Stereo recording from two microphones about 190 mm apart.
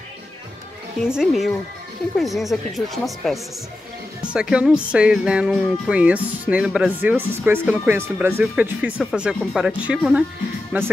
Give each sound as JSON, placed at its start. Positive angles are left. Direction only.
{"t": 1.0, "sound": "speech", "side_deg": 0}